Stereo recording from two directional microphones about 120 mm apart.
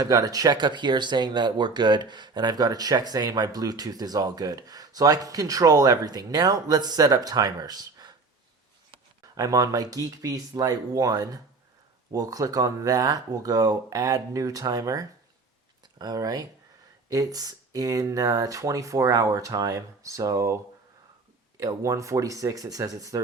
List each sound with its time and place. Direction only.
0.0 s speech: 30° right (ahead or behind)
9.3 s speech: 30° right (ahead or behind)
21.6 s speech: 30° right (ahead or behind)